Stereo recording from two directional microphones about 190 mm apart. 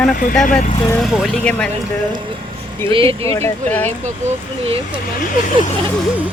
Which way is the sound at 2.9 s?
25° right (ahead or behind).